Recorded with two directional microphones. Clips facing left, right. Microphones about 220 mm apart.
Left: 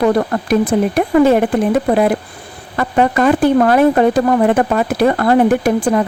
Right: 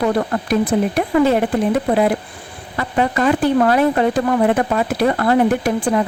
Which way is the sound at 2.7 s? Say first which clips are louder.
Left 4 dB; 50° left (ahead or behind).